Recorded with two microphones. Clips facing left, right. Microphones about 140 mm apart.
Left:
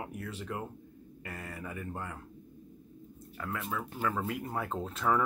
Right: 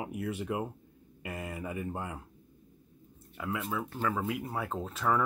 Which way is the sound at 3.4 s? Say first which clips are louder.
Right 2 dB; 5° right (ahead or behind).